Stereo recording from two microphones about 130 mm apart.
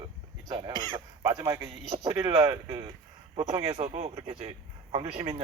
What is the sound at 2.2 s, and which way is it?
Speech, 40° right (ahead or behind).